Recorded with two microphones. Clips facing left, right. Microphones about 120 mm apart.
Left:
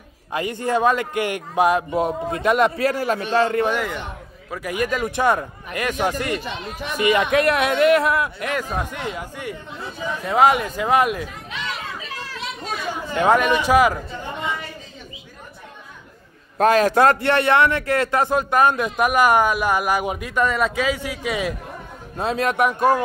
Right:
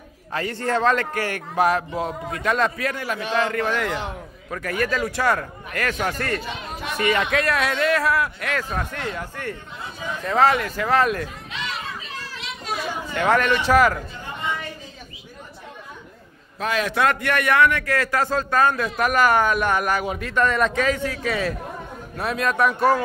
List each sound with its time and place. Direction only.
0.3 s a man's voice: 15° left (ahead or behind); by 3.6 s 30° left (ahead or behind)
4.5 s a man's voice: 10° left (ahead or behind)
13.1 s a man's voice: 20° left (ahead or behind)
16.5 s a man's voice: 45° left (ahead or behind); by 21.5 s 15° left (ahead or behind)
22.1 s speech: 25° left (ahead or behind)